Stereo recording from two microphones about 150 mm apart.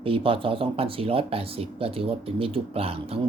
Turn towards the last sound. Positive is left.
turn(degrees=-40)  # may be behind; listen again after turning